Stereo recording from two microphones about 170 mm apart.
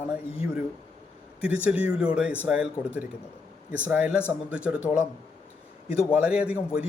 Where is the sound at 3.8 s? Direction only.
10° right (ahead or behind).